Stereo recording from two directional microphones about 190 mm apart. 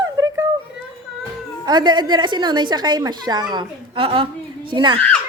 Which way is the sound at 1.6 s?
20° right (ahead or behind).